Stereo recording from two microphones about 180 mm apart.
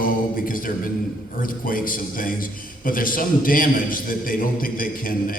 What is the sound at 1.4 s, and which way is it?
A man's voice, 50° left (ahead or behind).